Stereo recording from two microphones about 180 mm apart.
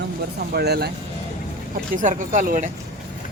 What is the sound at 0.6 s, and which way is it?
Speech, 65° right (ahead or behind).